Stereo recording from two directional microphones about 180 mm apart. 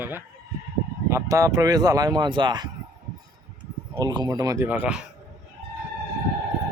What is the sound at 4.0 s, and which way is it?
Speech, 25° right (ahead or behind).